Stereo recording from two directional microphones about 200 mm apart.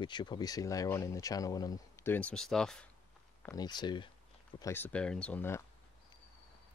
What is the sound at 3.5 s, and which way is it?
Speech, 20° left (ahead or behind).